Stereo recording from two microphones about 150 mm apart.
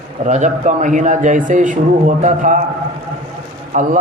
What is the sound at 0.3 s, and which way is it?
A man's voice, 55° right (ahead or behind).